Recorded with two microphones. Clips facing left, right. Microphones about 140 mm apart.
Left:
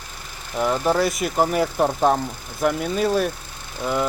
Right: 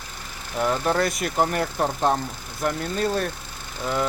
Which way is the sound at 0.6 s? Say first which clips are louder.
Left 2 dB; 5° left (ahead or behind).